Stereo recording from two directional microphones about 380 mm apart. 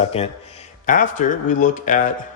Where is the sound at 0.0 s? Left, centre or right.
Centre.